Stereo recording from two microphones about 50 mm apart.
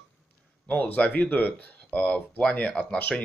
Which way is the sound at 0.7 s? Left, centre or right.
Left.